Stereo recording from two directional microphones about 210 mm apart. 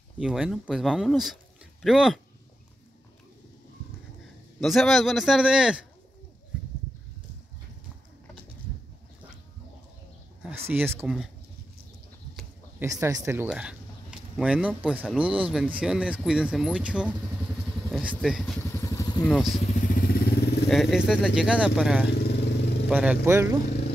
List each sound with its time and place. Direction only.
0.2 s speech: centre (ahead or behind)
4.6 s speech: centre (ahead or behind)
10.4 s speech: 10° right (ahead or behind)
12.8 s speech: 15° right (ahead or behind)
18.1 s vehicle: centre (ahead or behind); by 19.2 s 15° left (ahead or behind)
19.2 s speech: centre (ahead or behind)
19.6 s vehicle: 40° left (ahead or behind)
20.7 s speech: centre (ahead or behind)
22.2 s vehicle: 55° left (ahead or behind)
22.8 s speech: 5° right (ahead or behind)